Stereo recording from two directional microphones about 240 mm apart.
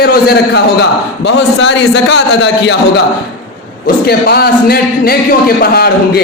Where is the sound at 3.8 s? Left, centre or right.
Left.